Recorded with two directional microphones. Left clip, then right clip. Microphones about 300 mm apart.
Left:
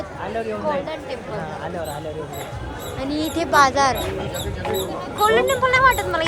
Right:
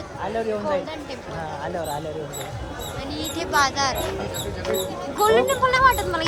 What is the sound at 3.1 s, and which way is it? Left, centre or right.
Speech, centre.